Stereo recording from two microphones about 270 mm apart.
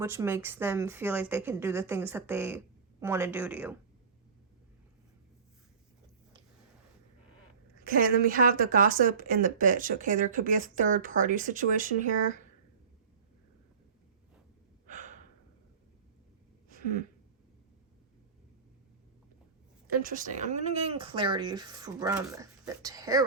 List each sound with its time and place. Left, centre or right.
0.0 s a woman's voice: centre
7.9 s speech: right
14.8 s breathing: right
16.6 s a sound: right
20.0 s a woman's voice: right; by 23.2 s centre